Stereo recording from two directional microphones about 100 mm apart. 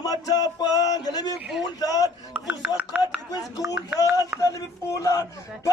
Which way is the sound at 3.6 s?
30° right (ahead or behind).